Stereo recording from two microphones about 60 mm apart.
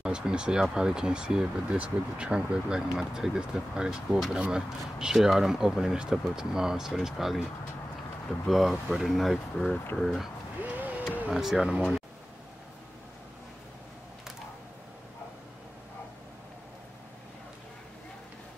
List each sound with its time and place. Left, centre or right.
0.0 s speech: centre
8.5 s speech: centre
10.6 s a sound: right
11.3 s speech: centre